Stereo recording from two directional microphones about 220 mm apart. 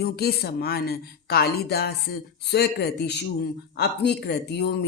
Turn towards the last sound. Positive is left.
turn(degrees=50)  # may be behind; listen again after turning